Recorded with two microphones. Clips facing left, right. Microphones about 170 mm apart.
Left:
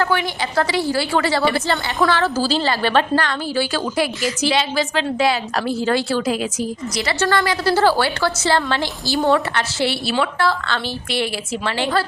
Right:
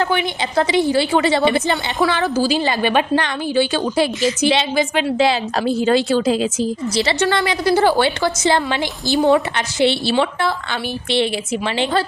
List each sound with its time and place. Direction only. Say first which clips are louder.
0.0 s a woman's voice: right 1 dB; 20° right (ahead or behind)